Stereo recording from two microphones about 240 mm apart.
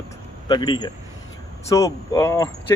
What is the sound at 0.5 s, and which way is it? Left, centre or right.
Speech, centre.